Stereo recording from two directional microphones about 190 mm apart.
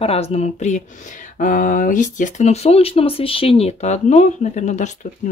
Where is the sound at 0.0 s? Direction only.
30° left (ahead or behind).